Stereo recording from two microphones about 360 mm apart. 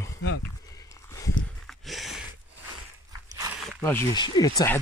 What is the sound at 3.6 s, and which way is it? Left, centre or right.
Speech, centre.